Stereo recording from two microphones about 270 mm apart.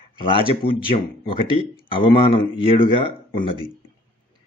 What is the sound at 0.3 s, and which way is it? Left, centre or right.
A man's voice, centre.